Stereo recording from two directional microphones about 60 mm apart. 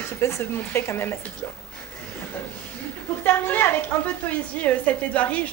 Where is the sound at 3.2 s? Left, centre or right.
Left.